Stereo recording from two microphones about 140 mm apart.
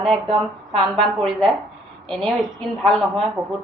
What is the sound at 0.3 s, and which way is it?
Speech, 40° right (ahead or behind).